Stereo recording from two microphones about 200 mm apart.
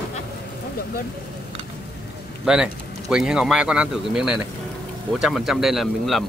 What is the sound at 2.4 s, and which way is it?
Speech, 5° right (ahead or behind).